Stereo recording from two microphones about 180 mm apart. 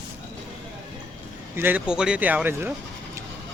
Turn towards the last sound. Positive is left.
turn(degrees=-15)  # may be behind; listen again after turning